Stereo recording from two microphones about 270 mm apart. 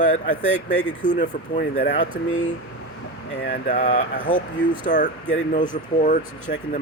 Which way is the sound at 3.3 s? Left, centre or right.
Left.